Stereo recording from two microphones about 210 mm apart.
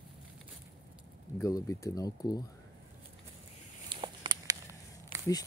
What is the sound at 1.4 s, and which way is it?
Speech, 15° left (ahead or behind).